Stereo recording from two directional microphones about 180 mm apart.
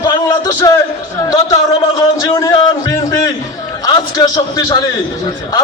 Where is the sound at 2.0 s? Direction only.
20° left (ahead or behind).